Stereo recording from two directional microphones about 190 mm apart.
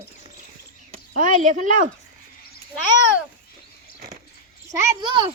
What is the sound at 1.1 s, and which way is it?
Speech, 45° right (ahead or behind).